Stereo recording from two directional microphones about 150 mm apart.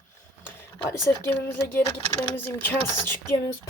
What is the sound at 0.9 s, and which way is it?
Speech, 15° left (ahead or behind).